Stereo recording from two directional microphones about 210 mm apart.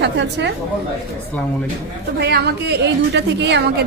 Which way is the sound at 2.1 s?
50° right (ahead or behind).